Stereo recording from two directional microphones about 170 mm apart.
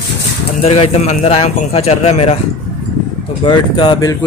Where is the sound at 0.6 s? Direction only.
35° left (ahead or behind).